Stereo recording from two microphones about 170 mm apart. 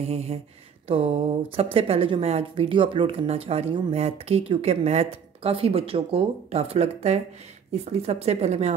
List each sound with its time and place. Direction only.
0.0 s a woman's voice: 35° right (ahead or behind)